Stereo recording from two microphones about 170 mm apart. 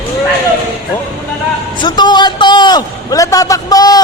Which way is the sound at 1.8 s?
25° left (ahead or behind).